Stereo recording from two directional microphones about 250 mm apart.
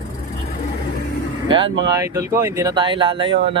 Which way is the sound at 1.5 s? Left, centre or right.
Centre.